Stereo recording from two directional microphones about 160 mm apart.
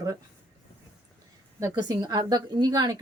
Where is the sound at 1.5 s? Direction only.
25° right (ahead or behind).